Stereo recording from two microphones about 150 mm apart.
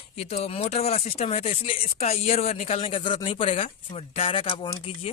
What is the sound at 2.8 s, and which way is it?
A woman's voice, 30° left (ahead or behind).